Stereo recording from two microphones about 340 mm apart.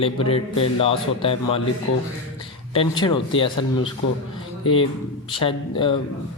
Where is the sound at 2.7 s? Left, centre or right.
Centre.